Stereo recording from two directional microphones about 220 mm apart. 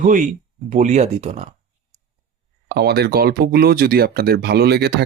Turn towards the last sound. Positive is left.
turn(degrees=-50)  # may be behind; listen again after turning